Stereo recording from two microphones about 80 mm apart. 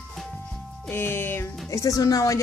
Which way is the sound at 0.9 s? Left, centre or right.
Left.